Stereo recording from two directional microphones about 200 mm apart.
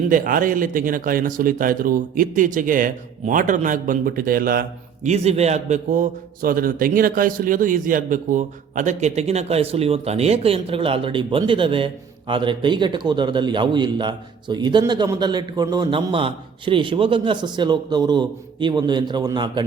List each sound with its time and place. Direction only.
0.1 s speech: 45° right (ahead or behind)
5.0 s a man's voice: 35° right (ahead or behind)